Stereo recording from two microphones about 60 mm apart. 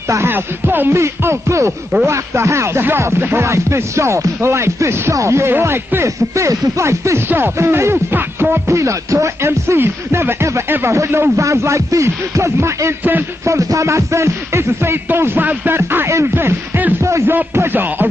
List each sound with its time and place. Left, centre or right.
0.3 s music: right
0.9 s speech: right
3.2 s music: right
3.4 s speech: right
6.0 s speech: right
7.2 s music: right
8.6 s speech: right
13.5 s speech: right
15.1 s music: right